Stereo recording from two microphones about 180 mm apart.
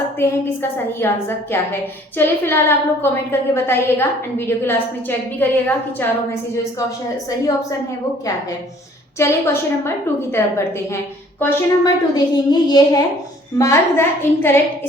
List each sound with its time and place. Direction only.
0.2 s a woman's voice: 15° left (ahead or behind)
9.1 s a woman's voice: 15° left (ahead or behind)